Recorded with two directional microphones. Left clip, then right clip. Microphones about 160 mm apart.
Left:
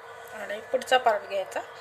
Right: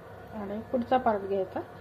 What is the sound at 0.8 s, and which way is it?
Speech, 25° left (ahead or behind).